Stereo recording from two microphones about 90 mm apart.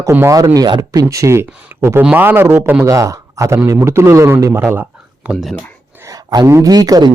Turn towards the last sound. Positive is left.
turn(degrees=-45)  # may be behind; listen again after turning